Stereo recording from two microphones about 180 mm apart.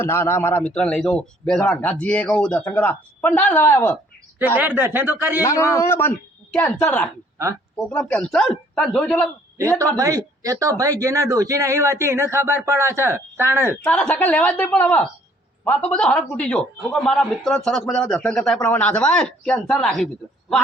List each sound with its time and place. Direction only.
0.0 s speech: 15° left (ahead or behind)
4.4 s speech: 10° right (ahead or behind)
5.4 s a man's voice: 15° left (ahead or behind)
10.0 s speech: 20° right (ahead or behind)
13.8 s a man's voice: 5° left (ahead or behind)